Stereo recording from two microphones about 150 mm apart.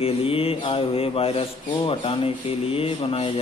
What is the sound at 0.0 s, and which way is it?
Speech, 40° left (ahead or behind).